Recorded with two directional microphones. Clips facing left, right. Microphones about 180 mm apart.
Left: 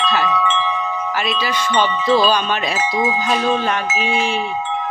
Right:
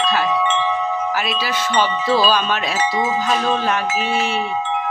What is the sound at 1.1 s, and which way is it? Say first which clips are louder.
Speech: left 1 dB; 5° right (ahead or behind).